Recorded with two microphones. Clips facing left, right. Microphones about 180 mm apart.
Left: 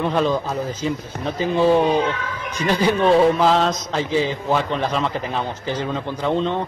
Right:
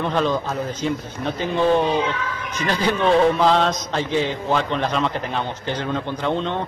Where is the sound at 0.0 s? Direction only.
5° left (ahead or behind).